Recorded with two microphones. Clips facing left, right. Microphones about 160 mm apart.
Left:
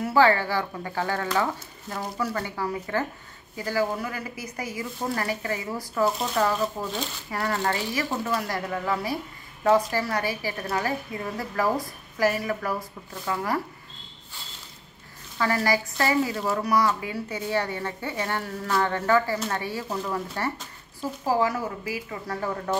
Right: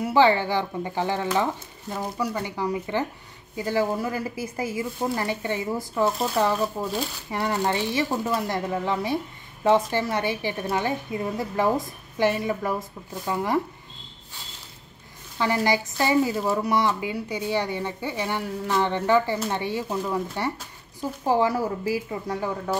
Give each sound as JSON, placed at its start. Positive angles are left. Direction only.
{"t": 0.0, "sound": "a woman's voice", "side_deg": -20}
{"t": 6.4, "sound": "speech", "side_deg": -5}
{"t": 7.2, "sound": "a woman's voice", "side_deg": -20}
{"t": 8.4, "sound": "a woman's voice", "side_deg": -25}
{"t": 15.3, "sound": "a woman's voice", "side_deg": -20}
{"t": 19.9, "sound": "speech", "side_deg": -10}
{"t": 21.3, "sound": "a woman's voice", "side_deg": -30}
{"t": 22.3, "sound": "speech", "side_deg": -10}